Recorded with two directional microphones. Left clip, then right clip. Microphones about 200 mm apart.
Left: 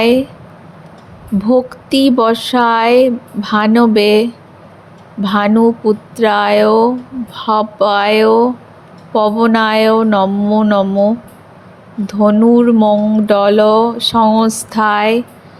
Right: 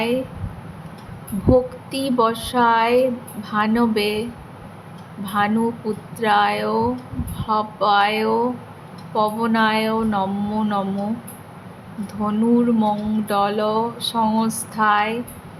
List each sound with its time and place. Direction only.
1.5 s speech: 35° left (ahead or behind)
12.0 s speech: 35° left (ahead or behind)